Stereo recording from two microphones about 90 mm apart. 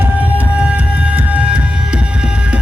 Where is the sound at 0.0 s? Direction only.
15° right (ahead or behind).